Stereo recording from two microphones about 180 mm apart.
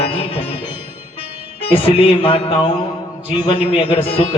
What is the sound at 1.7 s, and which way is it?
Music, 30° left (ahead or behind).